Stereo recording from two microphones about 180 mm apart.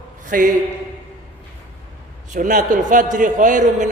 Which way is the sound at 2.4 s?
45° right (ahead or behind).